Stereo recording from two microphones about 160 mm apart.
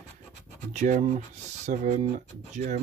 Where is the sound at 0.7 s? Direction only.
50° right (ahead or behind).